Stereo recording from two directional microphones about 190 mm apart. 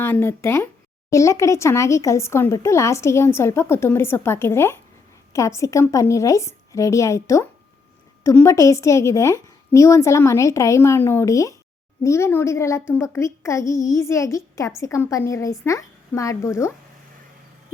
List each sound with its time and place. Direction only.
0.0 s speech: 10° left (ahead or behind)